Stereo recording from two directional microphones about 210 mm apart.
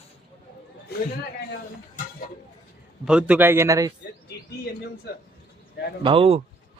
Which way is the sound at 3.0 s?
5° right (ahead or behind).